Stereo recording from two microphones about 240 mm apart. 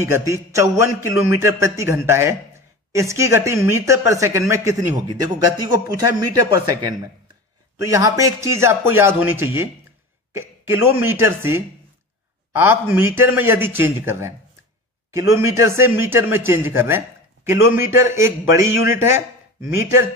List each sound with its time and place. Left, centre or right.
0.0 s a man's voice: centre